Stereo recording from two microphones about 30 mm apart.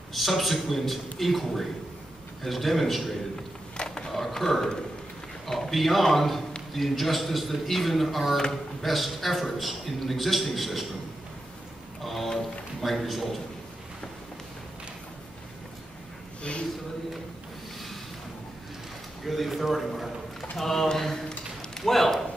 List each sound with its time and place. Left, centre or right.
0.1 s a man's voice: centre
3.7 s a sound: left
4.3 s a man's voice: centre
12.0 s a man's voice: centre
16.5 s speech: left
19.2 s a man's voice: centre
20.5 s speech: centre
21.3 s a sound: left
21.8 s speech: centre